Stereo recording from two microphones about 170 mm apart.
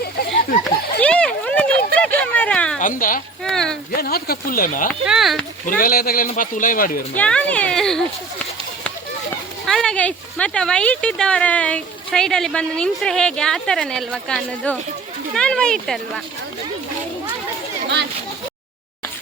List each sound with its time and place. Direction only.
1.0 s a sound: 5° left (ahead or behind)
2.8 s speech: 55° left (ahead or behind)
3.4 s speech: 5° left (ahead or behind)
3.9 s speech: 65° left (ahead or behind)
5.0 s speech: centre (ahead or behind)
5.6 s speech: 55° left (ahead or behind)
7.2 s speech: 5° left (ahead or behind)